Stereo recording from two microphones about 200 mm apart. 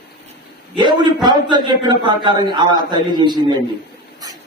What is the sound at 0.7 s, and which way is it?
A man's voice, 25° right (ahead or behind).